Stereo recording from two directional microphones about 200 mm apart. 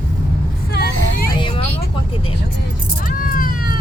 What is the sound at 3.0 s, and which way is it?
Cat, 45° left (ahead or behind).